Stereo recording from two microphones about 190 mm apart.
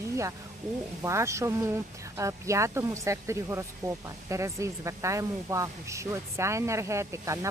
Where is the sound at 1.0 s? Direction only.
15° right (ahead or behind).